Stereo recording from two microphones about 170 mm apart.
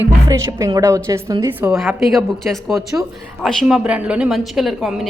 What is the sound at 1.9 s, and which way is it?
A woman's voice, centre (ahead or behind).